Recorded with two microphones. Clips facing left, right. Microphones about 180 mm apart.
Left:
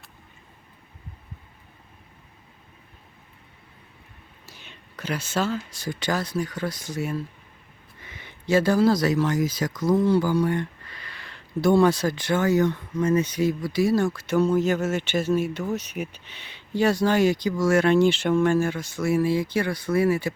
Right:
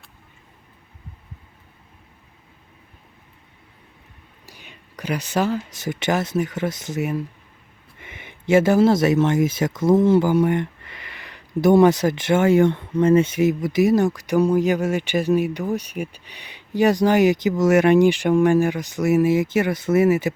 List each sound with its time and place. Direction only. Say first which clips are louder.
4.4 s speech: right 3 dB; 10° right (ahead or behind)